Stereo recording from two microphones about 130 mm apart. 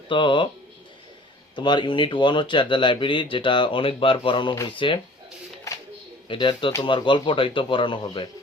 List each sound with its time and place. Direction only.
0.1 s speech: 40° left (ahead or behind)
1.5 s speech: 35° left (ahead or behind)
6.2 s speech: 40° left (ahead or behind)